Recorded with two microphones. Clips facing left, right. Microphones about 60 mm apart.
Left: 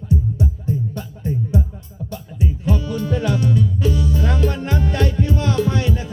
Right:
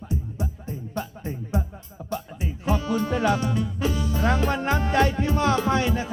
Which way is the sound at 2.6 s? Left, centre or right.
Right.